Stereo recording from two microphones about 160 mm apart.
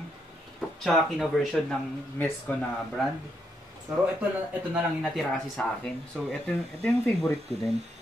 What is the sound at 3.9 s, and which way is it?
Speech, centre (ahead or behind).